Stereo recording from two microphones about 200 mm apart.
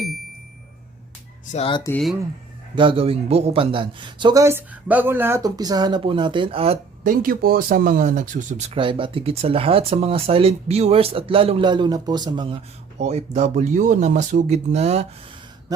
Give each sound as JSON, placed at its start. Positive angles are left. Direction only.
{"t": 1.5, "sound": "speech", "side_deg": 30}
{"t": 2.7, "sound": "speech", "side_deg": -25}
{"t": 7.0, "sound": "speech", "side_deg": -40}
{"t": 13.0, "sound": "speech", "side_deg": -35}